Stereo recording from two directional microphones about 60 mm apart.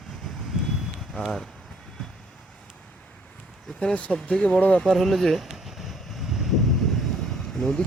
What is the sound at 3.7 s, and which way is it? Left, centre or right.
Speech, left.